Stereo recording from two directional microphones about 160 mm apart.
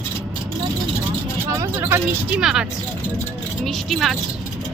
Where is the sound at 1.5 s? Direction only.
20° right (ahead or behind).